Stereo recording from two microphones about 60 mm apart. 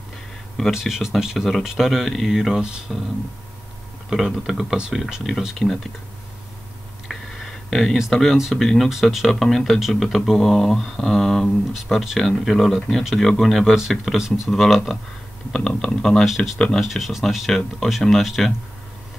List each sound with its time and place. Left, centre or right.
0.6 s speech: centre
4.1 s speech: centre
7.1 s a sound: centre
7.7 s speech: centre
14.5 s speech: centre
15.5 s speech: centre
16.3 s speech: centre
16.5 s speech: centre
16.8 s speech: centre